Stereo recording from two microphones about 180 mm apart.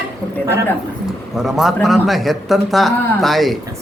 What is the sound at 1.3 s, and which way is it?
Speech, centre (ahead or behind).